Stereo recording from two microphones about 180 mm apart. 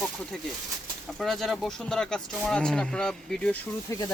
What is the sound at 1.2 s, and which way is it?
Speech, centre (ahead or behind).